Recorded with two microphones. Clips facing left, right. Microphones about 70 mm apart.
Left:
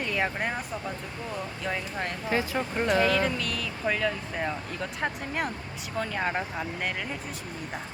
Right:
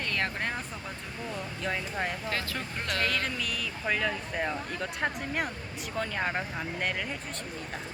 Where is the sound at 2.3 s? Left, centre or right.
Centre.